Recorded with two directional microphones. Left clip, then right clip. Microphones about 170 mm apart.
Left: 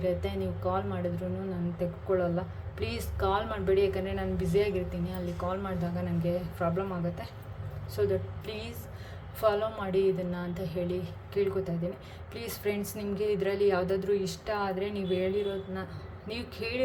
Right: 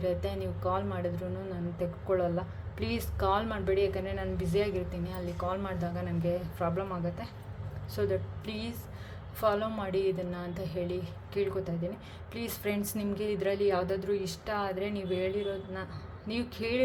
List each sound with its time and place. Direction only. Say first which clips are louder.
0.0 s a woman's voice: left 1 dB; 15° right (ahead or behind)
16.3 s a woman's voice: right 2 dB; 15° right (ahead or behind)